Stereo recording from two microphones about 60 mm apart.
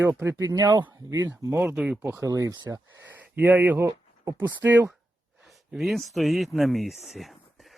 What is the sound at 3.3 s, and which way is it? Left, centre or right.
Speech, right.